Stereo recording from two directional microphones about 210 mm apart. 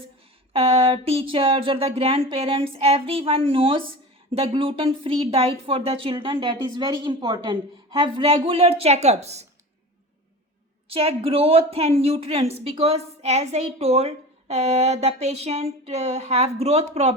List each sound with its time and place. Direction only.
0.5 s a woman's voice: 25° right (ahead or behind)
10.8 s a woman's voice: 25° right (ahead or behind)